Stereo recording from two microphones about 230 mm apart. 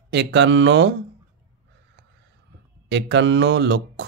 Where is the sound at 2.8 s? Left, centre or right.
Right.